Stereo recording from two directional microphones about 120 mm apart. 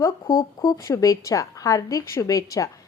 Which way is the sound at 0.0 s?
30° left (ahead or behind).